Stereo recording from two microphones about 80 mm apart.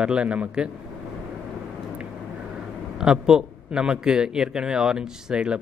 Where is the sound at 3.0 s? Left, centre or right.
Centre.